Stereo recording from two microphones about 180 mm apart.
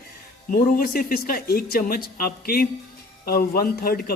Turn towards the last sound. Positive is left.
turn(degrees=55)  # may be behind; listen again after turning